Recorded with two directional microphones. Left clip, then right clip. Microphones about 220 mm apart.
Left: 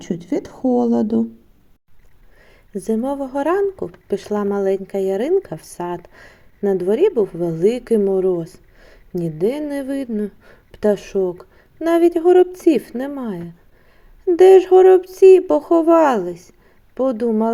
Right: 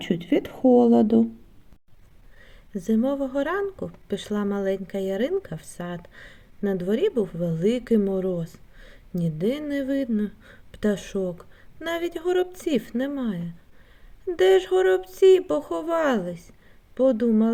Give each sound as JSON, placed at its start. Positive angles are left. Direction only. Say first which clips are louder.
{"t": 0.1, "sound": "a woman's voice", "louder": "left 1 dB", "side_deg": -10}
{"t": 0.6, "sound": "speech", "louder": "right 1 dB", "side_deg": 20}
{"t": 2.5, "sound": "speech", "louder": "left 5 dB", "side_deg": 5}